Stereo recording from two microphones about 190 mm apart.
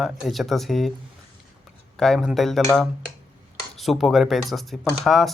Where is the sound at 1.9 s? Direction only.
5° left (ahead or behind).